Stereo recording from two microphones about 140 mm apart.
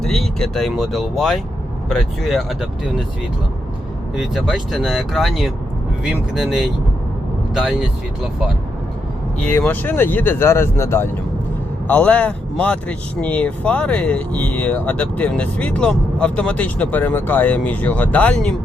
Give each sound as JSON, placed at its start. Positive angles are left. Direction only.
{"t": 0.0, "sound": "speech", "side_deg": 0}
{"t": 4.2, "sound": "speech", "side_deg": 0}
{"t": 9.4, "sound": "speech", "side_deg": 15}